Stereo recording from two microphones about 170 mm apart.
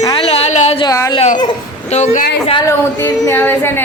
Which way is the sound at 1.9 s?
40° left (ahead or behind).